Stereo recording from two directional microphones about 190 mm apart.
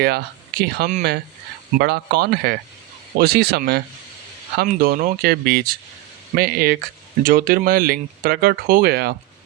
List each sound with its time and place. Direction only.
0.0 s speech: 55° right (ahead or behind)